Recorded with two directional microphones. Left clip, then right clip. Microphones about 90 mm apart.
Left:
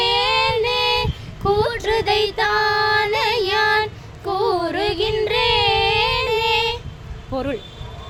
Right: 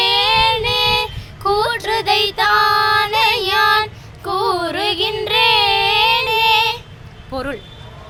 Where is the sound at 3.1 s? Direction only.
45° left (ahead or behind).